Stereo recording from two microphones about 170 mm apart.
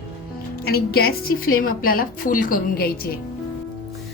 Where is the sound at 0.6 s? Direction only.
65° left (ahead or behind).